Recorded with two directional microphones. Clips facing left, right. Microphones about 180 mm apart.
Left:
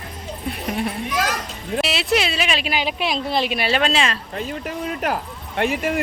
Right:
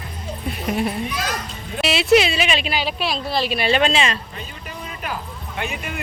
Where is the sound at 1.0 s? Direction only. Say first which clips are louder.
Left 3 dB; 85° left.